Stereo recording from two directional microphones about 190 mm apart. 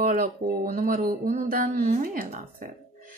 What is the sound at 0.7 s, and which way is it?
Speech, 45° right (ahead or behind).